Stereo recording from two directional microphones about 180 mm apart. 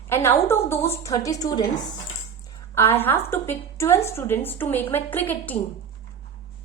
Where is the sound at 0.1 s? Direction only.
15° left (ahead or behind).